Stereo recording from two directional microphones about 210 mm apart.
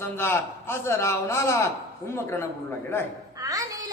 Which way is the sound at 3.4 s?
15° right (ahead or behind).